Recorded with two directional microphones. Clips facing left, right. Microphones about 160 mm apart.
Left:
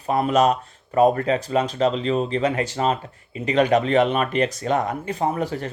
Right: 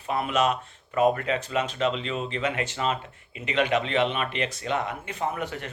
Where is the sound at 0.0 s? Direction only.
40° left (ahead or behind).